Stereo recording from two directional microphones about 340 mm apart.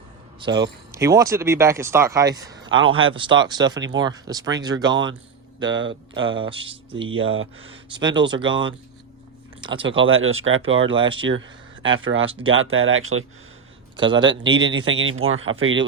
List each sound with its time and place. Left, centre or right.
0.3 s speech: centre
5.8 s speech: right
7.6 s speech: centre
10.0 s speech: right
10.9 s speech: centre
11.2 s speech: right
12.2 s speech: centre
12.7 s speech: right
13.9 s a man's voice: centre
14.4 s speech: right